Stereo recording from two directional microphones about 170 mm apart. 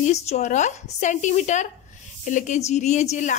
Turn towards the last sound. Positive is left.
turn(degrees=45)  # may be behind; listen again after turning